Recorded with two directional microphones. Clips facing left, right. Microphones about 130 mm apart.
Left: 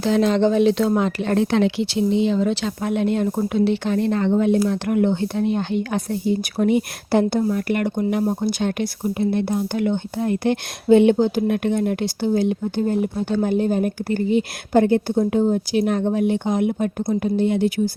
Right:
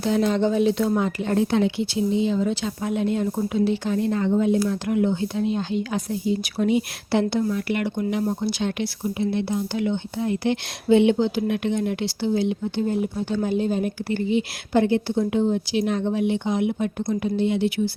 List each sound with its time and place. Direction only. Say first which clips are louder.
0.0 s speech: left 3 dB; 90° left; by 17.9 s 45° left (ahead or behind)